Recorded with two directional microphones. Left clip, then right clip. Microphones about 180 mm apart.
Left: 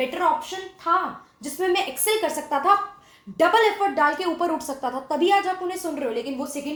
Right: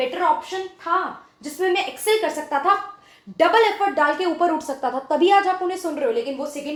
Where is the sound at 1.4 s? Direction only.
45° left (ahead or behind).